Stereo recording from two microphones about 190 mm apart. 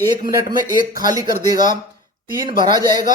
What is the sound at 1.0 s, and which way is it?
Speech, 20° right (ahead or behind).